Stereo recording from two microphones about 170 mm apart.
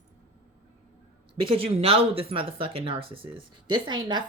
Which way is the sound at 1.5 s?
35° right (ahead or behind).